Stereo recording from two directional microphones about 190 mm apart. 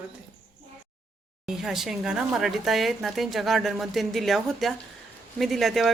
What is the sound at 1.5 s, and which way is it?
Speech, centre (ahead or behind).